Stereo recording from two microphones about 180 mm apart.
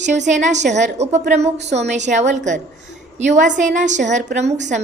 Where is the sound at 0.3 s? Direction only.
40° right (ahead or behind).